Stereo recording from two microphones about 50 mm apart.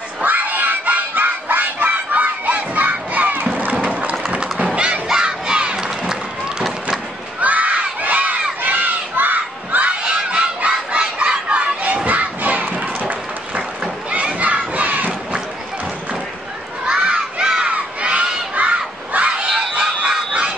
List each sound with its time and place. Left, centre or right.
0.2 s a sound: right
4.7 s crowd: right
7.3 s a sound: right
8.0 s crowd: right
10.0 s honk: right
11.1 s battle cry: right
14.1 s crowd: right
14.7 s battle cry: right
17.0 s battle cry: centre
19.7 s fowl: centre